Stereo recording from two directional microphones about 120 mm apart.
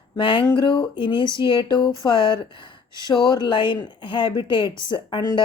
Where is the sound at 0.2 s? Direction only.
45° left (ahead or behind).